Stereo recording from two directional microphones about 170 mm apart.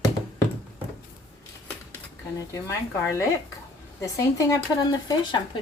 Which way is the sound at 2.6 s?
15° left (ahead or behind).